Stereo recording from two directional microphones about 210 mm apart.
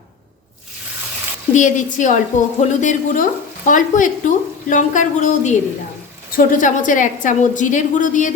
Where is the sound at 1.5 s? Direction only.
35° left (ahead or behind).